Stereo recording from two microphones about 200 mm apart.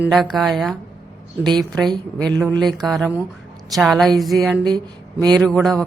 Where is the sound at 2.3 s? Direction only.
15° right (ahead or behind).